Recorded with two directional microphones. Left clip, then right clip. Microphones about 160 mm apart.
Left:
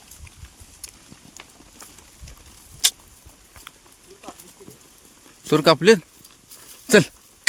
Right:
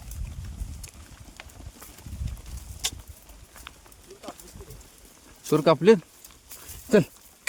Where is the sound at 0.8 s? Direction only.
30° right (ahead or behind).